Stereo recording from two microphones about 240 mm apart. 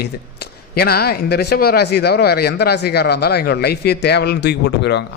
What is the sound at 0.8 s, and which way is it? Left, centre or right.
A man's voice, left.